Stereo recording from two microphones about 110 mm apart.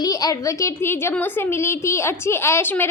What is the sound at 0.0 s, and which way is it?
A woman's voice, 35° left (ahead or behind).